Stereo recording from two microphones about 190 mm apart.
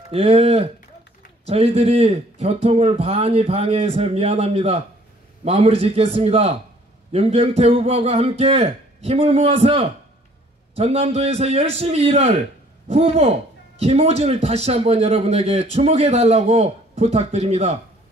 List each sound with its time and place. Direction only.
0.1 s a man's voice: 30° right (ahead or behind)